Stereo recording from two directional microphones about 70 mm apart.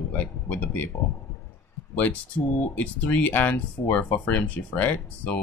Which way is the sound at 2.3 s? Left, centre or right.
Left.